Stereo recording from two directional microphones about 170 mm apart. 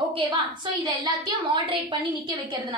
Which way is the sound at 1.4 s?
30° right (ahead or behind).